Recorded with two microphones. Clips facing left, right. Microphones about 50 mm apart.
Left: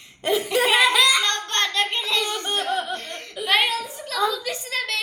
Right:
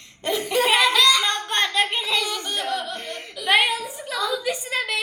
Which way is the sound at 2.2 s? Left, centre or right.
Left.